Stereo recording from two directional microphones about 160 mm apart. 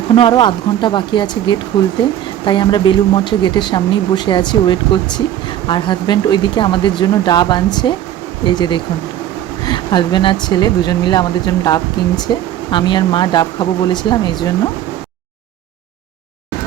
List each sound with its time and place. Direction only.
0.2 s speech: 30° left (ahead or behind)